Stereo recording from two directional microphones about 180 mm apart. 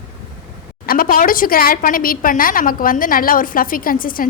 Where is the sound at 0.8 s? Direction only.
50° left (ahead or behind).